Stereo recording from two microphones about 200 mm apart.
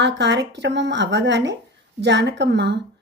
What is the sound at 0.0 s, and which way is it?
A woman's voice, 60° right (ahead or behind).